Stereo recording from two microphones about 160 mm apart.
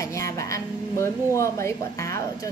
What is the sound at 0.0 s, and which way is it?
Speech, 20° left (ahead or behind).